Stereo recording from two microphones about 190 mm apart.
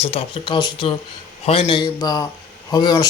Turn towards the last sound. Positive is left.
turn(degrees=20)  # may be behind; listen again after turning